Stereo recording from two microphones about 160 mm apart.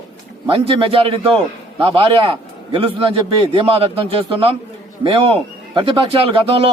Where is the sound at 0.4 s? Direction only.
35° right (ahead or behind).